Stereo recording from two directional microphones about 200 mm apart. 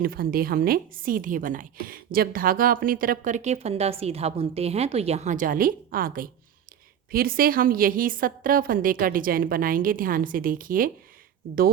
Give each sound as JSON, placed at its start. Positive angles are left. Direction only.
{"t": 0.0, "sound": "a woman's voice", "side_deg": -45}